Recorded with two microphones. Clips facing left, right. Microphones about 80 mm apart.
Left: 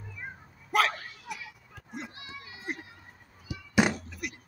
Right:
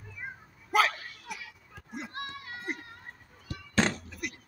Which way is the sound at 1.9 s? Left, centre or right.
Centre.